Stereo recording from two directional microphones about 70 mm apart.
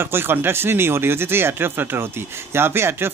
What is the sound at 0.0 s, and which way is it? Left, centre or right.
Speech, right.